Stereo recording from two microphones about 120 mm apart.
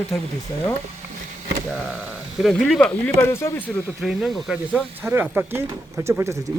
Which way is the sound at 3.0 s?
20° left (ahead or behind).